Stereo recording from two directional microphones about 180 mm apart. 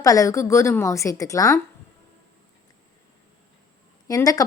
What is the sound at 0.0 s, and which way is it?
A woman's voice, 20° left (ahead or behind).